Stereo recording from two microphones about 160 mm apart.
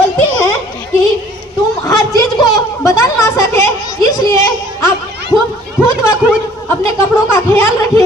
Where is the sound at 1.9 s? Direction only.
25° left (ahead or behind).